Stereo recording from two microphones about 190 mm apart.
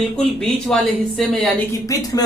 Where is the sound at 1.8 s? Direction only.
20° left (ahead or behind).